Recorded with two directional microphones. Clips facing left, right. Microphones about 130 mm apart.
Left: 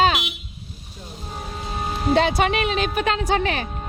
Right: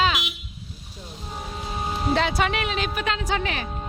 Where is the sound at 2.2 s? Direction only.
20° left (ahead or behind).